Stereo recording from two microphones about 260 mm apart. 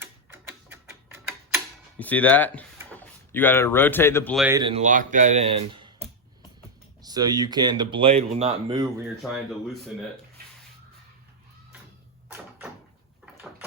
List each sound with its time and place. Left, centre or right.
0.0 s tick-tock: centre
2.0 s speech: centre
4.4 s speech: centre
7.0 s speech: centre
13.3 s a sound: centre